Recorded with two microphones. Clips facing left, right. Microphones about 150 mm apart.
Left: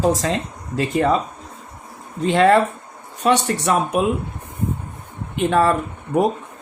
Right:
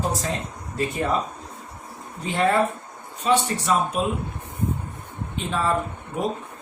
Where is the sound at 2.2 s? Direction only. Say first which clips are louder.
Left 8 dB; 85° left.